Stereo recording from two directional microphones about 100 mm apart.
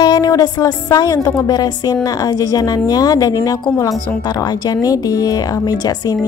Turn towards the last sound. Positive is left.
turn(degrees=40)  # may be behind; listen again after turning